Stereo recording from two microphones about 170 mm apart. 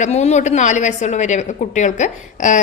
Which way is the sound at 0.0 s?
40° left (ahead or behind).